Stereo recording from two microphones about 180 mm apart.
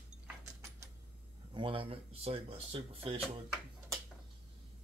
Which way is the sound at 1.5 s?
30° right (ahead or behind).